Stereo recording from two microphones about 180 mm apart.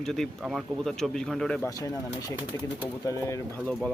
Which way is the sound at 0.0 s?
Centre (ahead or behind).